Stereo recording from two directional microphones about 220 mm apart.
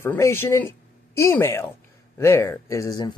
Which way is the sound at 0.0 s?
10° left (ahead or behind).